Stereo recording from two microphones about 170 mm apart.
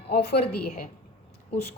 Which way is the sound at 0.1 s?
75° left (ahead or behind).